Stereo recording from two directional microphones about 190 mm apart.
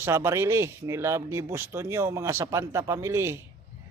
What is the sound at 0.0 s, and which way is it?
Speech, 15° right (ahead or behind).